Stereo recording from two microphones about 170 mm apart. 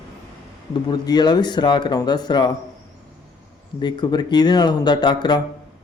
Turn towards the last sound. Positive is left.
turn(degrees=25)  # may be behind; listen again after turning